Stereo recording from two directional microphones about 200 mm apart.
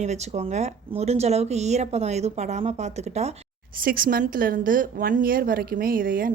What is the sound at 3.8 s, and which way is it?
A woman's voice, 45° right (ahead or behind).